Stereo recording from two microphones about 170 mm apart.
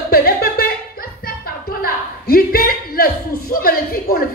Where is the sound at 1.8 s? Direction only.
60° left (ahead or behind).